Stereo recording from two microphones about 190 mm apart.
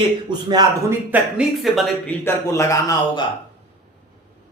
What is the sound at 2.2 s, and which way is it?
A man's voice, 15° left (ahead or behind).